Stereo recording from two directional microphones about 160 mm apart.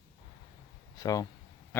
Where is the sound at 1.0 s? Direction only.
25° left (ahead or behind).